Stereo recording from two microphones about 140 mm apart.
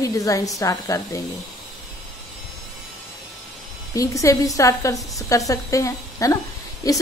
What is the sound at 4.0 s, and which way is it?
A woman's voice, 25° left (ahead or behind).